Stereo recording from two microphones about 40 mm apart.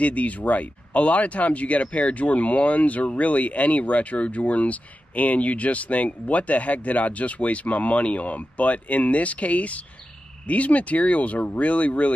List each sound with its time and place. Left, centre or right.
0.0 s speech: left